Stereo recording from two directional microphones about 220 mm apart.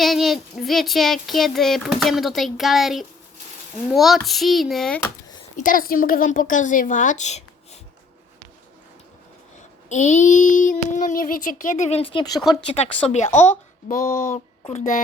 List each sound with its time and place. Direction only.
0.0 s child singing: centre (ahead or behind)
5.5 s child singing: 40° left (ahead or behind)
9.9 s child singing: 30° left (ahead or behind)